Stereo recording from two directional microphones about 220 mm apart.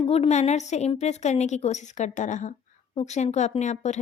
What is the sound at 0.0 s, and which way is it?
A woman's voice, 25° left (ahead or behind).